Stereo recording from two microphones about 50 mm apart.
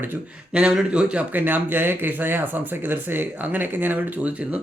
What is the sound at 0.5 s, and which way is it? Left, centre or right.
Speech, centre.